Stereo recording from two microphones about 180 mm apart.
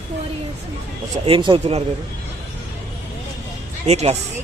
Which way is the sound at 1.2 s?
30° right (ahead or behind).